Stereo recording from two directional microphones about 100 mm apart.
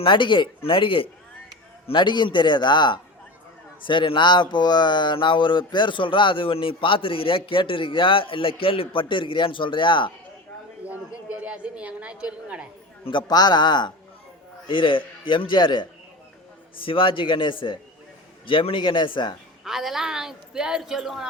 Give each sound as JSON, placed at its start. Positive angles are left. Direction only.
{"t": 0.0, "sound": "speech", "side_deg": 55}
{"t": 1.9, "sound": "a man's voice", "side_deg": 50}
{"t": 10.8, "sound": "a woman's voice", "side_deg": -15}
{"t": 13.1, "sound": "a man's voice", "side_deg": 50}
{"t": 16.8, "sound": "a man's voice", "side_deg": 60}
{"t": 19.6, "sound": "speech", "side_deg": 0}